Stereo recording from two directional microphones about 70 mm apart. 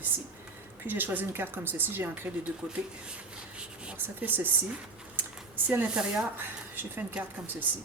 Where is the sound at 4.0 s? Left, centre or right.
Right.